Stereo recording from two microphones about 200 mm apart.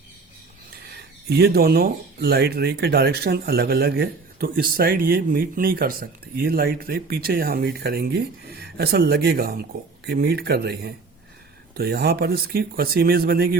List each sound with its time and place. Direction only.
0.9 s speech: 55° right (ahead or behind)